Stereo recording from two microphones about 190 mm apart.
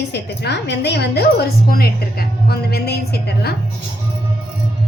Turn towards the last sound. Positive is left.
turn(degrees=55)  # may be behind; listen again after turning